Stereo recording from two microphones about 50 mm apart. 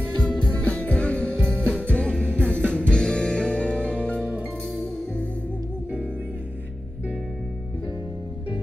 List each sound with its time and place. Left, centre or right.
0.2 s music: centre
1.3 s music: centre